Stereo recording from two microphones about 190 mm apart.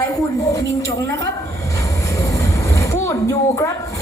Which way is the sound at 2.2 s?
15° left (ahead or behind).